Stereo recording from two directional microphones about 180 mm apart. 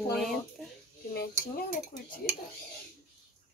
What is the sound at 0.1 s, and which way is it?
Speech, centre (ahead or behind).